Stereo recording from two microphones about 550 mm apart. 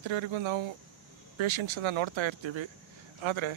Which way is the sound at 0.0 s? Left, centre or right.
Right.